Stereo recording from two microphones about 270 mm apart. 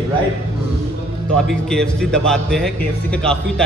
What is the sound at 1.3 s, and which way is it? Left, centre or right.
A man's voice, centre.